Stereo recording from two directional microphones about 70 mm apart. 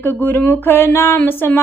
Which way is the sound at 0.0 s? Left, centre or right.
Left.